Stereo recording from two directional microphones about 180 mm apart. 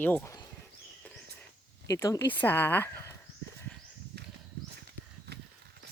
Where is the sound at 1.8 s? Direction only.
15° left (ahead or behind).